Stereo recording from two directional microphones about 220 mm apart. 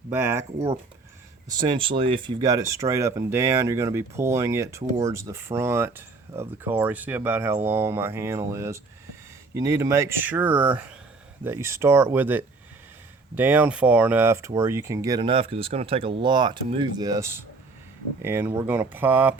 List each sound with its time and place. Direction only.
0.1 s speech: 10° right (ahead or behind)